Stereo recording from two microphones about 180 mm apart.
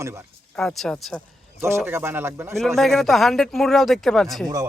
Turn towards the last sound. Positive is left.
turn(degrees=0)  # may be behind; listen again after turning